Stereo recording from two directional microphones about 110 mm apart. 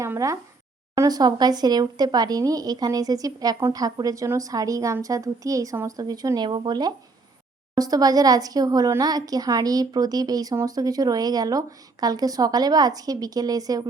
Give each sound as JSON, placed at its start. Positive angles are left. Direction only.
{"t": 0.0, "sound": "speech", "side_deg": -30}